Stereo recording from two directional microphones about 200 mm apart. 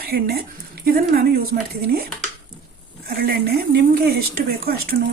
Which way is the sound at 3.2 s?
50° right (ahead or behind).